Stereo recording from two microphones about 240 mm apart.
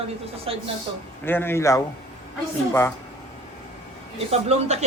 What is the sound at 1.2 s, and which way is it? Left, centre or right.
A man's voice, centre.